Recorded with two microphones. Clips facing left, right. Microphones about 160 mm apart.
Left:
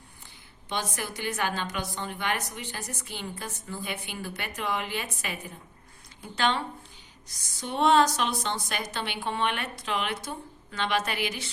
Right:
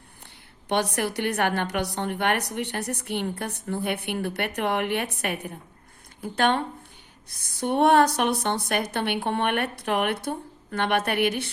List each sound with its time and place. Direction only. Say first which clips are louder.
0.7 s a woman's voice: right 8 dB; 70° right (ahead or behind)